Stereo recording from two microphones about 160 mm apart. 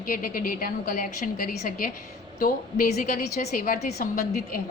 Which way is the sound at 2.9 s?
60° left (ahead or behind).